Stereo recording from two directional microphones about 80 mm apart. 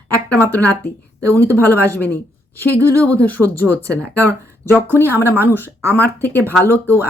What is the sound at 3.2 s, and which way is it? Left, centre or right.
Speech, left.